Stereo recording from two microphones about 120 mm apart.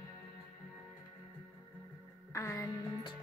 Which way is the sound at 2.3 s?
25° left (ahead or behind).